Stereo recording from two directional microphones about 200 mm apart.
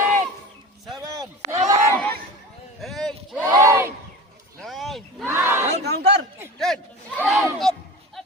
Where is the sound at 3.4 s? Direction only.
15° right (ahead or behind).